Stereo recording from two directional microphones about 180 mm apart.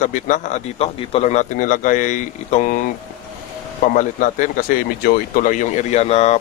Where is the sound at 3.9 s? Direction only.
45° left (ahead or behind).